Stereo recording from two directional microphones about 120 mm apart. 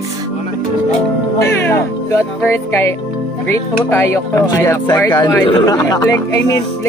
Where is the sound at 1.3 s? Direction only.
20° left (ahead or behind).